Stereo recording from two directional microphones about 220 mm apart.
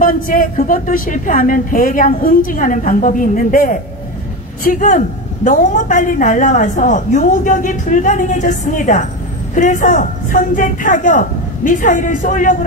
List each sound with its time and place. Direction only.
0.0 s a woman's voice: 35° left (ahead or behind)